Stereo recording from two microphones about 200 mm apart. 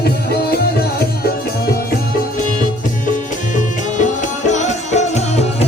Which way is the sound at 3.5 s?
40° left (ahead or behind).